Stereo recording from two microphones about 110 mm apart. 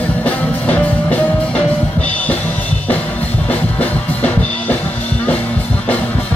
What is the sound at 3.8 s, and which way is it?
Music, 15° left (ahead or behind).